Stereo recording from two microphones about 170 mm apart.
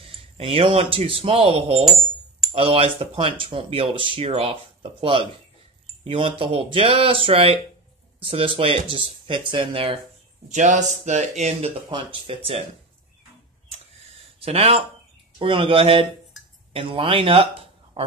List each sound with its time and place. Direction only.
0.0 s speech: 30° right (ahead or behind)
10.5 s speech: 45° right (ahead or behind)
14.4 s speech: 35° right (ahead or behind)
16.3 s a sound: centre (ahead or behind)
16.7 s speech: 30° right (ahead or behind)